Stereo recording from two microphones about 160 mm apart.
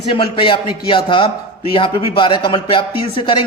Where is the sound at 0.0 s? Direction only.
35° left (ahead or behind).